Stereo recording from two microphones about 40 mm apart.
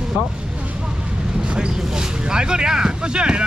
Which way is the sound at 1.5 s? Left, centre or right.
Centre.